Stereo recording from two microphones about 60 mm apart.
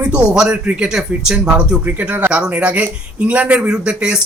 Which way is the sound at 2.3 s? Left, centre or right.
Centre.